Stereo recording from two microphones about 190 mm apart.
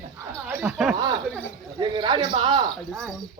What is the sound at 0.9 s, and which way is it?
Chuckle, 20° right (ahead or behind).